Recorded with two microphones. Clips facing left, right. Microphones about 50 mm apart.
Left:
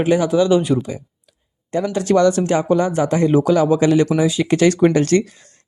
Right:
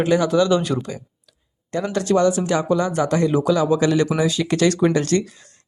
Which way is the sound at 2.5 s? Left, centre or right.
Left.